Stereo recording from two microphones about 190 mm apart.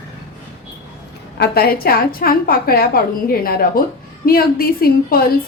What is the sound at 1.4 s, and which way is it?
A woman's voice, 55° left (ahead or behind).